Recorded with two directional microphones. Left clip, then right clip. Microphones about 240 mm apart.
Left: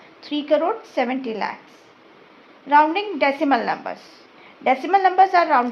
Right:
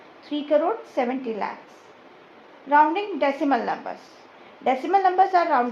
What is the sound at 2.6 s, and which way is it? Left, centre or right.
A woman's voice, left.